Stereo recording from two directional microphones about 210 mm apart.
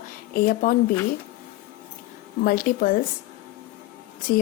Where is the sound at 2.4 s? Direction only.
45° left (ahead or behind).